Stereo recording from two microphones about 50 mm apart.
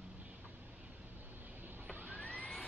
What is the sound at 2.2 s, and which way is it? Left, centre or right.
Music, left.